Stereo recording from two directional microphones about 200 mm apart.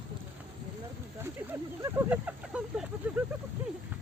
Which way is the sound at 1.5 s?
10° right (ahead or behind).